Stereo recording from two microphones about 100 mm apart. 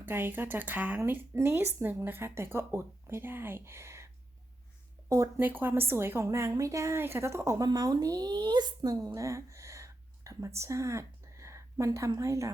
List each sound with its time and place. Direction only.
0.0 s speech: 20° right (ahead or behind)
5.4 s a woman's voice: 20° right (ahead or behind)